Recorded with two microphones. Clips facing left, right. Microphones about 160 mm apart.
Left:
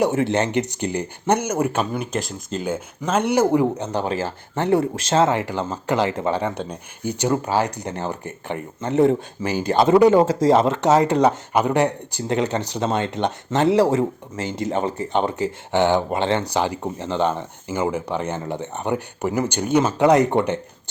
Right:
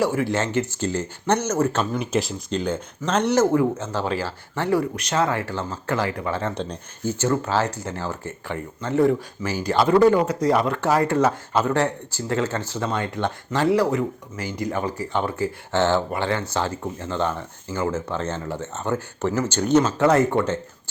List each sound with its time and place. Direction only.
0.0 s speech: 20° left (ahead or behind)
6.5 s speech: 10° left (ahead or behind)